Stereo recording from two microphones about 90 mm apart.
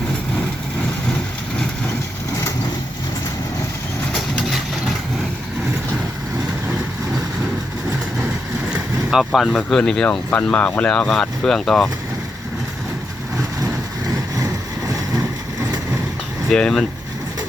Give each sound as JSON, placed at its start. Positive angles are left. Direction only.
{"t": 4.1, "sound": "vehicle", "side_deg": 0}
{"t": 9.0, "sound": "speech", "side_deg": 0}
{"t": 14.8, "sound": "boat", "side_deg": -40}
{"t": 16.5, "sound": "speech", "side_deg": 5}